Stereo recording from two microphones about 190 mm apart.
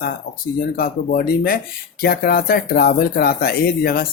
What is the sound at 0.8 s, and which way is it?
Speech, 50° left (ahead or behind).